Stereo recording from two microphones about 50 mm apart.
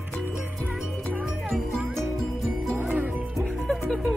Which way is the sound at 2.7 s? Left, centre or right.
Right.